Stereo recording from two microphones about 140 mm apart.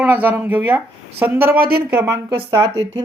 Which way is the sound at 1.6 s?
90° right.